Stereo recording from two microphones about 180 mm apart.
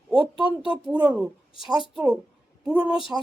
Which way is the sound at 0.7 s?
5° right (ahead or behind).